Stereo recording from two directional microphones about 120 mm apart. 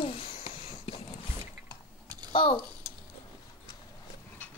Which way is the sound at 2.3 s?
45° left (ahead or behind).